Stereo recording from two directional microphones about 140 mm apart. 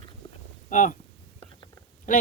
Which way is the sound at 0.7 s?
65° left (ahead or behind).